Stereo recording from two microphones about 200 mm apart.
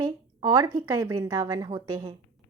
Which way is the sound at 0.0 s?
20° right (ahead or behind).